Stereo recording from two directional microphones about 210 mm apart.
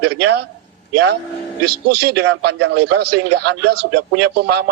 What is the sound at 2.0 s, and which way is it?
A man's voice, 55° right (ahead or behind).